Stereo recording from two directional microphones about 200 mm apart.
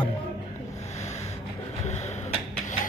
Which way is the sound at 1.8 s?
35° left (ahead or behind).